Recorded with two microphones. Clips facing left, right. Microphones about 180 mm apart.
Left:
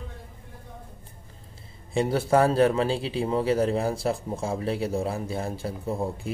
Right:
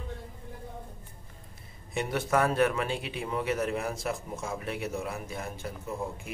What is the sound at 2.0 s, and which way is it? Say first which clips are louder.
A man's voice: left 6 dB; 30° left (ahead or behind).